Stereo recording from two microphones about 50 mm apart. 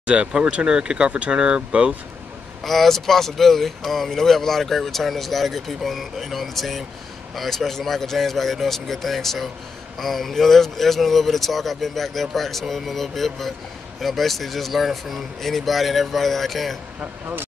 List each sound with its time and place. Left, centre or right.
0.0 s speech: centre
2.6 s speech: centre
17.0 s speech: right